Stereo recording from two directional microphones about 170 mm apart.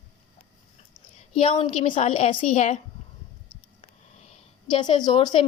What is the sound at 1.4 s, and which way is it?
A woman's voice, 30° left (ahead or behind).